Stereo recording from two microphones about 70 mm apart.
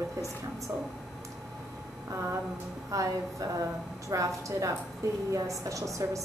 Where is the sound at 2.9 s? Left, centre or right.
Right.